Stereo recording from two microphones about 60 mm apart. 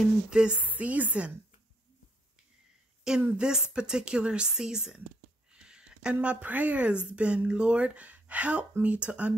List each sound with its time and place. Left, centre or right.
0.3 s a woman's voice: centre
0.6 s speech: right
3.2 s a woman's voice: centre
5.5 s a sound: centre
6.2 s speech: right